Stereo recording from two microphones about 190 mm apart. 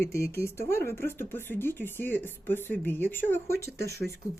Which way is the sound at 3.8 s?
55° right (ahead or behind).